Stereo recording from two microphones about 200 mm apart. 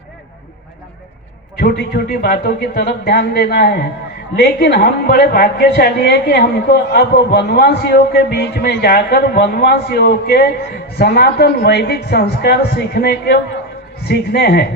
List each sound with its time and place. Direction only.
1.5 s speech: 50° left (ahead or behind)